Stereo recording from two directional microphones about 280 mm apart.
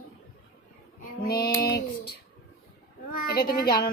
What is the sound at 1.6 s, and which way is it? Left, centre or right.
Child singing, left.